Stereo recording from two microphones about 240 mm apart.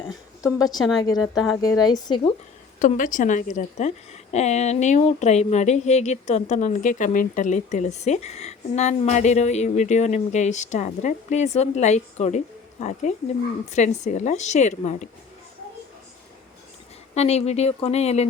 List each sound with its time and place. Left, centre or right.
0.8 s a woman's voice: centre
1.0 s speech: centre
2.7 s a woman's voice: left
17.2 s a woman's voice: left